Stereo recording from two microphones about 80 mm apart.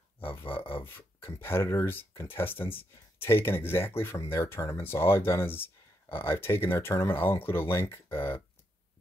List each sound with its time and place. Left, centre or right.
0.4 s speech: left